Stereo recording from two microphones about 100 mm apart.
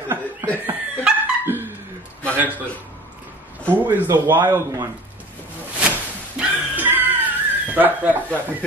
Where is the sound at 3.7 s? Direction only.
20° right (ahead or behind).